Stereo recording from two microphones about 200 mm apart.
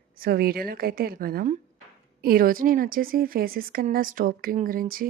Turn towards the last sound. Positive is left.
turn(degrees=-45)  # may be behind; listen again after turning